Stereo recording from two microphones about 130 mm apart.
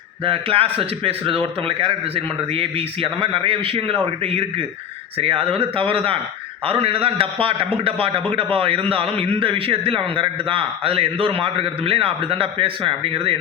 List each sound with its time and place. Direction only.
0.3 s a man's voice: 45° right (ahead or behind)